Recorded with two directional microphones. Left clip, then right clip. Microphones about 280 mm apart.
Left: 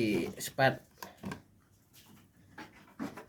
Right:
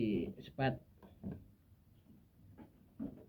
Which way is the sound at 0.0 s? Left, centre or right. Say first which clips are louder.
Left 6 dB; left.